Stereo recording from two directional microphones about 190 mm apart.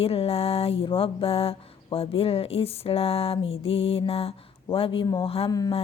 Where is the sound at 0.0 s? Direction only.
30° left (ahead or behind).